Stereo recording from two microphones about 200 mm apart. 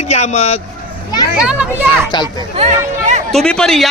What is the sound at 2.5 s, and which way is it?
Speech, 35° right (ahead or behind).